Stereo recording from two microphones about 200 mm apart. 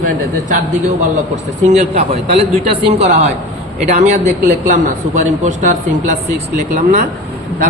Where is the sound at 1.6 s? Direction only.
35° right (ahead or behind).